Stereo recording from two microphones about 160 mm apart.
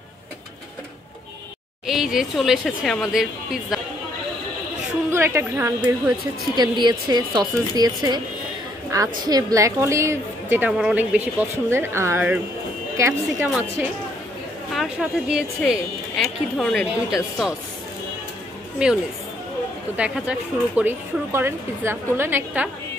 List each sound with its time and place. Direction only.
1.9 s speech: centre (ahead or behind)
5.1 s speech: 15° right (ahead or behind)
14.7 s speech: centre (ahead or behind)
18.8 s speech: 5° right (ahead or behind)
20.0 s speech: 5° right (ahead or behind)